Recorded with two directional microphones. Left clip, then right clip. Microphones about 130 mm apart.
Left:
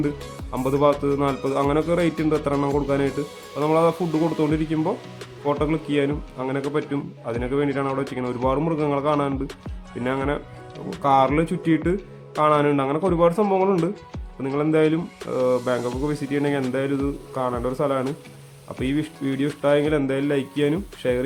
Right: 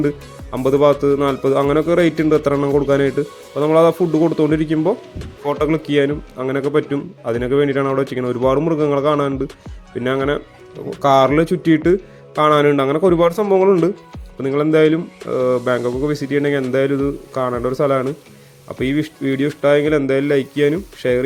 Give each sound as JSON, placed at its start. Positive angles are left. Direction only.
{"t": 0.5, "sound": "speech", "side_deg": -30}
{"t": 4.0, "sound": "a man's voice", "side_deg": -15}
{"t": 4.7, "sound": "speech", "side_deg": -35}
{"t": 13.4, "sound": "a man's voice", "side_deg": -25}